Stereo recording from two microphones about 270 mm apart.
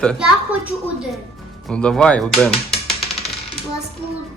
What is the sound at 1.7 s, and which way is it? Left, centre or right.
Speech, centre.